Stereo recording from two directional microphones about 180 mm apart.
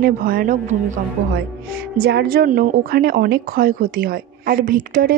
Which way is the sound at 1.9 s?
60° right (ahead or behind).